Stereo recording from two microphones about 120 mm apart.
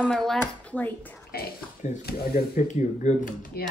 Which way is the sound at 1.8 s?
90° left.